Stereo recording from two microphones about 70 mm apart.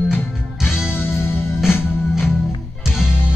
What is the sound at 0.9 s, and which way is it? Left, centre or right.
Music, left.